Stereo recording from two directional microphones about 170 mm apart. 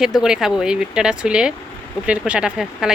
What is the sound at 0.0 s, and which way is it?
Speech, 5° right (ahead or behind).